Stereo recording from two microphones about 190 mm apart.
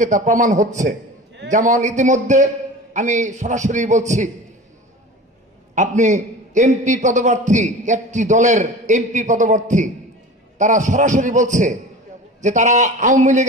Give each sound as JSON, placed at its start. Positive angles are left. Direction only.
{"t": 0.0, "sound": "a man's voice", "side_deg": -40}
{"t": 5.8, "sound": "a man's voice", "side_deg": -40}